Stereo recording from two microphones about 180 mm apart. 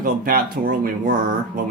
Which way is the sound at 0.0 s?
50° right (ahead or behind).